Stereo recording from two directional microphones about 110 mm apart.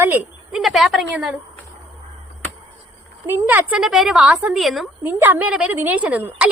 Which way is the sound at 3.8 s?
5° right (ahead or behind).